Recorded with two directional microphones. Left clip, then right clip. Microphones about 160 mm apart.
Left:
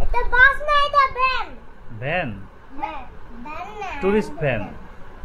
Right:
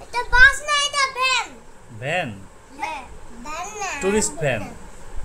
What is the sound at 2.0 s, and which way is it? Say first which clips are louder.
Speech: even; 10° right (ahead or behind).